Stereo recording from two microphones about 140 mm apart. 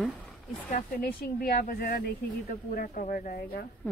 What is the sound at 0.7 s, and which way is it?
Speech, 90° left.